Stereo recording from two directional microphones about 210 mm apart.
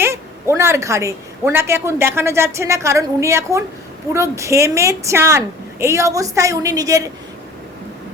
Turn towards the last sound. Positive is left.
turn(degrees=-15)  # may be behind; listen again after turning